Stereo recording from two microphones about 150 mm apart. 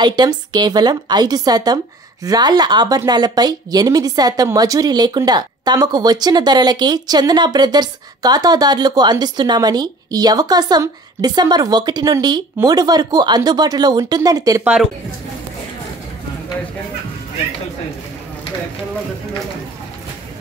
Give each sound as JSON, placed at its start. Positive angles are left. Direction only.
{"t": 0.0, "sound": "a woman's voice", "side_deg": -30}
{"t": 14.6, "sound": "a woman's voice", "side_deg": -5}